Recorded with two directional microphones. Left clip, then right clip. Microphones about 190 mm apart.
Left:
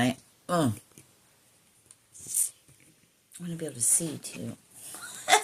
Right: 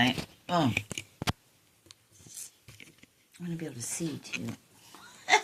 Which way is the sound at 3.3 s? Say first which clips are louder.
Left 3 dB; 25° left (ahead or behind).